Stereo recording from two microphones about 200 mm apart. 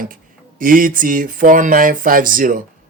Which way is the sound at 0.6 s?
45° right (ahead or behind).